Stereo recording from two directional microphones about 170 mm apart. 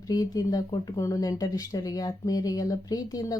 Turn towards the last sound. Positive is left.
turn(degrees=20)  # may be behind; listen again after turning